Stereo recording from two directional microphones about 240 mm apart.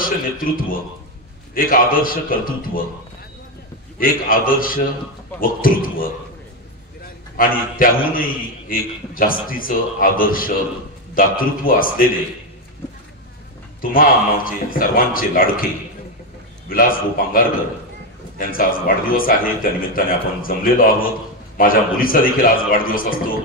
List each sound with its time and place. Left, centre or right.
0.0 s a man's voice: left
4.0 s a man's voice: left
7.3 s a man's voice: left
13.7 s a man's voice: left
16.7 s a man's voice: left
18.4 s a man's voice: left